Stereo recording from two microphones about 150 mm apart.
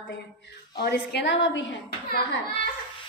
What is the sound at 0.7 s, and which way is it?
Speech, 90° left.